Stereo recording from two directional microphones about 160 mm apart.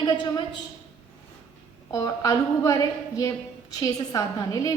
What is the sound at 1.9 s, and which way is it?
A woman's voice, 20° left (ahead or behind).